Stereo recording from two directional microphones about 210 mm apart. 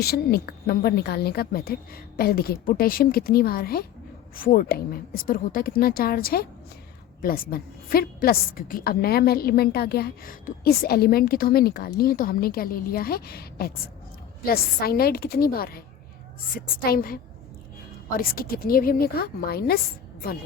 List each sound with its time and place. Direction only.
0.0 s a woman's voice: 50° left (ahead or behind)
18.2 s a woman's voice: 45° left (ahead or behind)